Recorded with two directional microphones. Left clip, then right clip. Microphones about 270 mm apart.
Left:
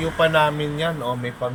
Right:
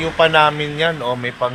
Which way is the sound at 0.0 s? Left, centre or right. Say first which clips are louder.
Right 5 dB; centre.